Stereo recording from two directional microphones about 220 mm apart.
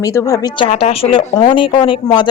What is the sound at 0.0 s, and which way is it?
A woman's voice, 15° left (ahead or behind).